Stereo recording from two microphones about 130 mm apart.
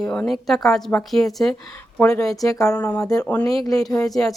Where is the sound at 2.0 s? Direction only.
25° left (ahead or behind).